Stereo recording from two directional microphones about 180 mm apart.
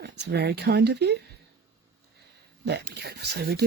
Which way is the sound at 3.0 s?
65° right (ahead or behind).